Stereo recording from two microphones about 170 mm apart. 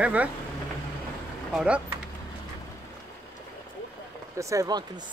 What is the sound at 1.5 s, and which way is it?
Speech, 5° right (ahead or behind).